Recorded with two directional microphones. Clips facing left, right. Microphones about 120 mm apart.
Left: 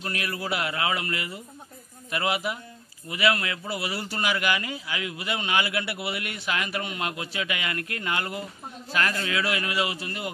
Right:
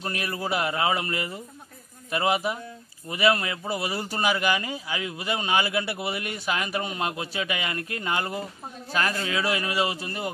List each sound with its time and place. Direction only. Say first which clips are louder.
0.0 s a man's voice: right 1 dB; 30° right (ahead or behind)
8.9 s a man's voice: even; 20° right (ahead or behind)
9.4 s a man's voice: right 2 dB; 35° right (ahead or behind)